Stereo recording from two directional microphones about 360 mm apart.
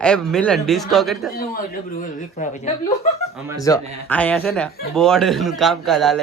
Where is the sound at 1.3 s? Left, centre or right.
Left.